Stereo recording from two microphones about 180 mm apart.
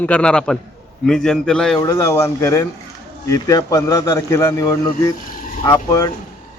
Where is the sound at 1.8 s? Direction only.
15° left (ahead or behind).